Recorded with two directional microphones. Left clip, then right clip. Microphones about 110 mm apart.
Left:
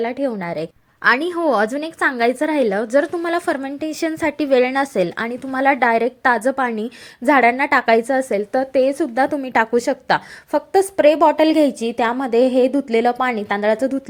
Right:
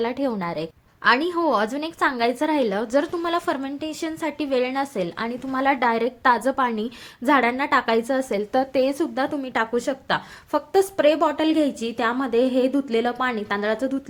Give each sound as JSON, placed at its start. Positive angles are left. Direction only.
{"t": 0.0, "sound": "a woman's voice", "side_deg": 25}
{"t": 0.4, "sound": "a woman's voice", "side_deg": 40}
{"t": 1.0, "sound": "a woman's voice", "side_deg": 60}
{"t": 9.1, "sound": "a woman's voice", "side_deg": 50}
{"t": 10.7, "sound": "a woman's voice", "side_deg": 45}